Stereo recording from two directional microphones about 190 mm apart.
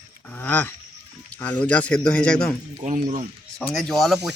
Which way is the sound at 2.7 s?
40° right (ahead or behind).